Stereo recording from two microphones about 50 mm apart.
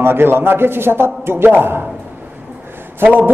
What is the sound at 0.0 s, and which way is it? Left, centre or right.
A man's voice, right.